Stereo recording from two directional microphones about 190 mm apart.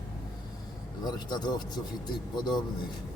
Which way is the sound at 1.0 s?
20° left (ahead or behind).